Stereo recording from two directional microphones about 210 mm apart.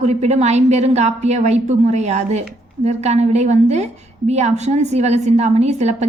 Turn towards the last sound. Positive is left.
turn(degrees=-30)  # may be behind; listen again after turning